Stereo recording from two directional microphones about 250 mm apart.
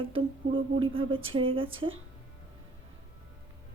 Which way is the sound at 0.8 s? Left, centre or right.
Right.